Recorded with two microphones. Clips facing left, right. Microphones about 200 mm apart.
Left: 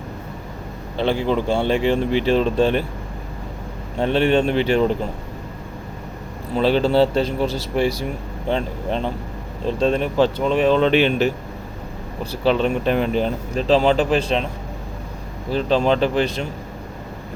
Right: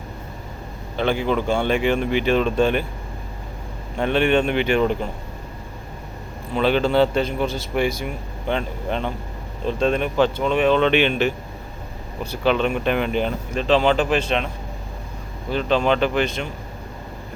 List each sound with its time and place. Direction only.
0.9 s speech: 30° left (ahead or behind)
3.9 s speech: 30° left (ahead or behind)
6.6 s speech: 35° left (ahead or behind)
15.5 s speech: 35° left (ahead or behind)